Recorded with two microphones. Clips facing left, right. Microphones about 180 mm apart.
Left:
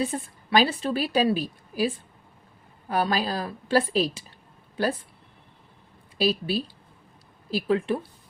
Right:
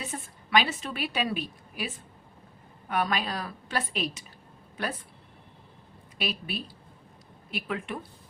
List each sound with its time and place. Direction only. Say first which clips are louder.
0.0 s a woman's voice: left 10 dB; 35° left (ahead or behind)
2.9 s a woman's voice: left 4 dB; 35° left (ahead or behind)
6.1 s a woman's voice: left 9 dB; 30° left (ahead or behind)